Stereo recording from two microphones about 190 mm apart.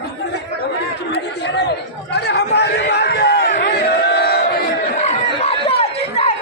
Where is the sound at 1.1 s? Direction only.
60° left (ahead or behind).